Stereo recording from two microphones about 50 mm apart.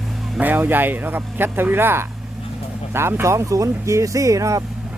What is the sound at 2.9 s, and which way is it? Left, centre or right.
Speech, right.